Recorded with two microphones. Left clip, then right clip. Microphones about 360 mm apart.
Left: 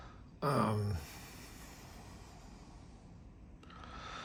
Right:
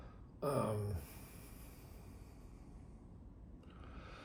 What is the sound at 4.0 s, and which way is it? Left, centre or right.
Vehicle, centre.